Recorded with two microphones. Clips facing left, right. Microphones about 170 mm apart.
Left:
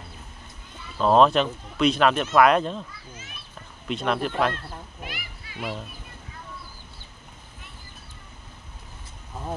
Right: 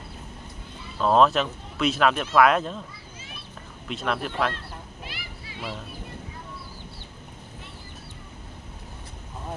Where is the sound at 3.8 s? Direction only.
Centre (ahead or behind).